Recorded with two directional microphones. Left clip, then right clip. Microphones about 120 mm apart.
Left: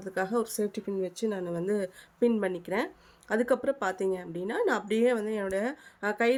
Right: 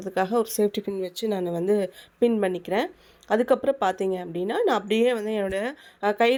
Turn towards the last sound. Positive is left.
turn(degrees=-20)  # may be behind; listen again after turning